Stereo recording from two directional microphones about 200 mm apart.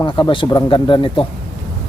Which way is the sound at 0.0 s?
25° left (ahead or behind).